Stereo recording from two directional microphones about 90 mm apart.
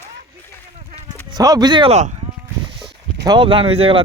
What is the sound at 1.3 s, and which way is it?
Speech, 45° right (ahead or behind).